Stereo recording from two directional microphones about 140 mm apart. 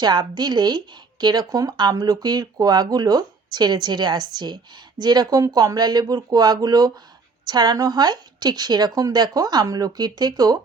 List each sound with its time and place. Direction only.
0.0 s speech: 30° right (ahead or behind)